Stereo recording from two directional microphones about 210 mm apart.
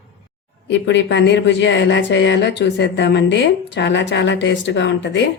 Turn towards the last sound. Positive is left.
turn(degrees=60)  # may be behind; listen again after turning